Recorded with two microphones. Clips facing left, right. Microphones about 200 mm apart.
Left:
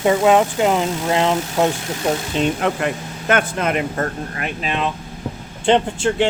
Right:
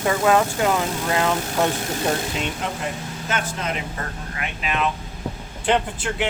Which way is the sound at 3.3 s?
60° left (ahead or behind).